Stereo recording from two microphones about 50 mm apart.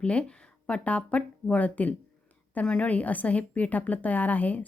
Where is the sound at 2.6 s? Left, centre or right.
Centre.